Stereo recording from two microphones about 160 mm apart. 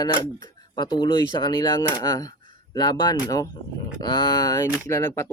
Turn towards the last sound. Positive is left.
turn(degrees=20)  # may be behind; listen again after turning